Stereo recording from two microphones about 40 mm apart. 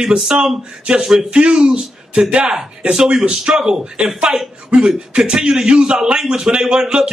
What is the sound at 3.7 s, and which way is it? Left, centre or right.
A man's voice, centre.